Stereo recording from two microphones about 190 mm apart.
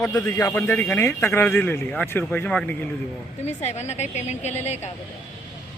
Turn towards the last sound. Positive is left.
turn(degrees=35)  # may be behind; listen again after turning